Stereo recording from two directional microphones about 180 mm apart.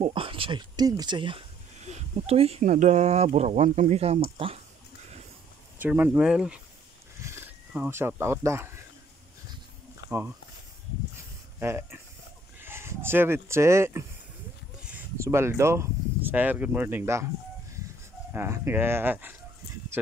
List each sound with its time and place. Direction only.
0.0 s speech: 30° right (ahead or behind)
5.8 s speech: 10° right (ahead or behind)
10.0 s speech: 15° right (ahead or behind)
11.6 s speech: 15° right (ahead or behind)
18.3 s speech: 15° right (ahead or behind)